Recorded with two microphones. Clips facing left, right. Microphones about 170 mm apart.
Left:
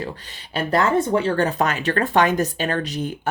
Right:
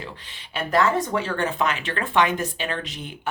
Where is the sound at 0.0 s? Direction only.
40° left (ahead or behind).